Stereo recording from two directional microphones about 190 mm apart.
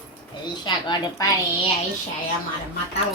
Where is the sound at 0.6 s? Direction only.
25° left (ahead or behind).